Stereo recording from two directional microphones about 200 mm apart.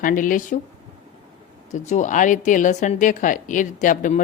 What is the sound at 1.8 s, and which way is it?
A woman's voice, 35° left (ahead or behind).